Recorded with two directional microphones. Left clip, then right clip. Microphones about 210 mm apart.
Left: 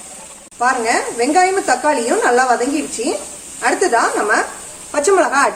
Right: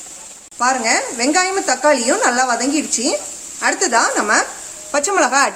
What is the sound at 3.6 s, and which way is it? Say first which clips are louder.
A woman's voice: left 1 dB; 55° right (ahead or behind).